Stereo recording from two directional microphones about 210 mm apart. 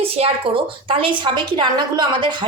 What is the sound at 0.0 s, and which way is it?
A woman's voice, 25° right (ahead or behind).